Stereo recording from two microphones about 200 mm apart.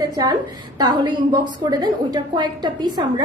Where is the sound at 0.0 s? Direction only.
20° right (ahead or behind).